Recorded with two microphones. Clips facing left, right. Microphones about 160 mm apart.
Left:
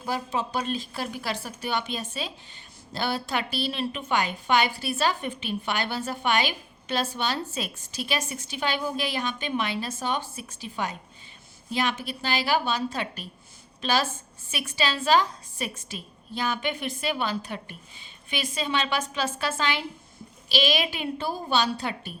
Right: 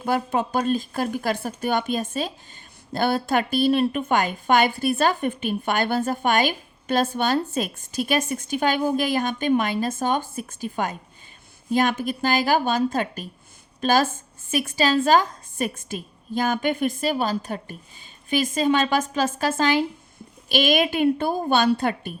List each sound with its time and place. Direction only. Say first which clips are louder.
0.0 s a woman's voice: right 6 dB; 55° right (ahead or behind)